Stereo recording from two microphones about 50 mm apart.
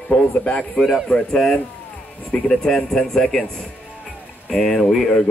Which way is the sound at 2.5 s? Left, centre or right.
Centre.